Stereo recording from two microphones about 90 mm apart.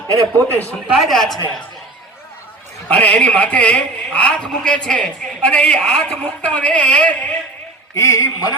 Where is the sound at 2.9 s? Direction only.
15° left (ahead or behind).